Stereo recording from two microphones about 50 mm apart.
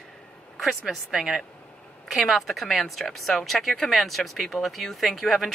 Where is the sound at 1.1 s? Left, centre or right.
Centre.